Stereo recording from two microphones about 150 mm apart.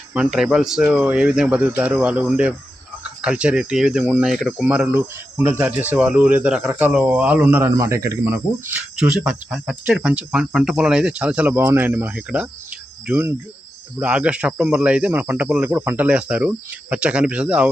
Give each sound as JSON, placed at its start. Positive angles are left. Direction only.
{"t": 0.1, "sound": "speech", "side_deg": -5}
{"t": 9.0, "sound": "speech", "side_deg": -5}